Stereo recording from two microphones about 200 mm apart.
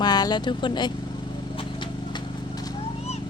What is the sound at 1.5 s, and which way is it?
Horse, 25° left (ahead or behind).